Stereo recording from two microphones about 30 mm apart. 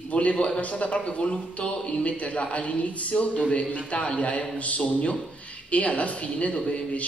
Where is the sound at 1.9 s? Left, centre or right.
Left.